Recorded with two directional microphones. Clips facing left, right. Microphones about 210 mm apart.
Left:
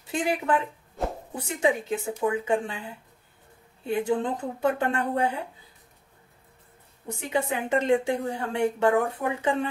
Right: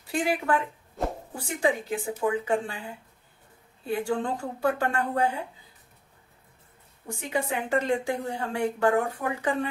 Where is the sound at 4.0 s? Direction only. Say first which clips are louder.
Left 3 dB; 20° left (ahead or behind).